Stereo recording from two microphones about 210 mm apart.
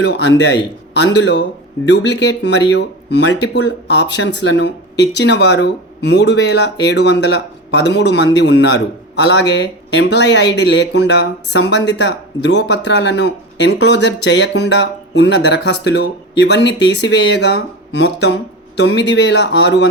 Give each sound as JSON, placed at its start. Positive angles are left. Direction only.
{"t": 0.0, "sound": "speech", "side_deg": 55}